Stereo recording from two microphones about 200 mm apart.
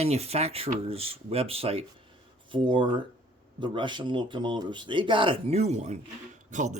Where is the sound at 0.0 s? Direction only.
30° right (ahead or behind).